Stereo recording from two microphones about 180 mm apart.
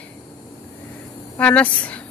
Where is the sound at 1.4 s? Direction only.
10° left (ahead or behind).